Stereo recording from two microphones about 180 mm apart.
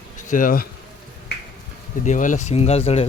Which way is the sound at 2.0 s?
45° left (ahead or behind).